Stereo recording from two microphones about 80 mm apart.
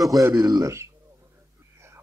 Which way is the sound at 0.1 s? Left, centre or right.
Right.